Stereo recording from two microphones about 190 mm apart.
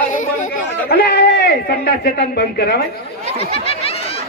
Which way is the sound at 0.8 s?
55° left (ahead or behind).